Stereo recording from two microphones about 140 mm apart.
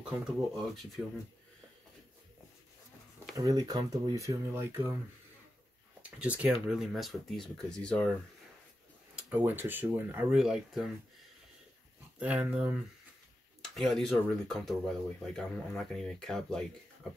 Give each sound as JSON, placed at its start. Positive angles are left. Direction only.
{"t": 1.0, "sound": "speech", "side_deg": 0}
{"t": 3.3, "sound": "speech", "side_deg": -25}
{"t": 6.0, "sound": "speech", "side_deg": -10}
{"t": 9.3, "sound": "speech", "side_deg": -15}
{"t": 12.2, "sound": "speech", "side_deg": -10}
{"t": 13.7, "sound": "speech", "side_deg": 0}